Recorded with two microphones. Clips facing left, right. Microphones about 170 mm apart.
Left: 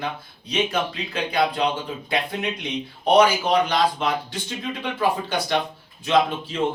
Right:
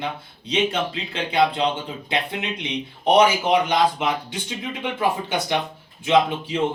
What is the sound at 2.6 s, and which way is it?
Speech, 20° right (ahead or behind).